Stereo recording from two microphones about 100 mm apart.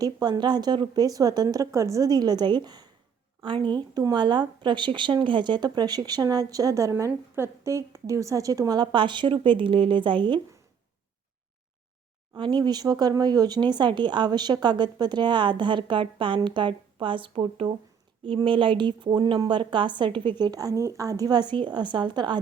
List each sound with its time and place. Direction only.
0.0 s a woman's voice: 45° right (ahead or behind)
3.4 s a woman's voice: 55° right (ahead or behind)
12.4 s speech: 50° right (ahead or behind)